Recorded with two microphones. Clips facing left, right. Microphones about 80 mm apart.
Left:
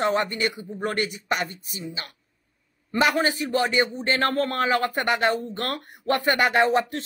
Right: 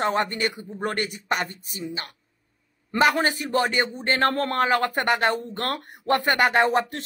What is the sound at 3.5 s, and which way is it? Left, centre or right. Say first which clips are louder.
Speech: even; right.